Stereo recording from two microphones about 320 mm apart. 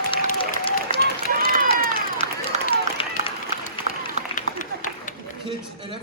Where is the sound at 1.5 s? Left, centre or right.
Right.